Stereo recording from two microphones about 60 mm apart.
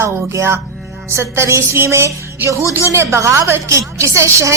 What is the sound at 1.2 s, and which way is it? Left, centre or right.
A woman's voice, right.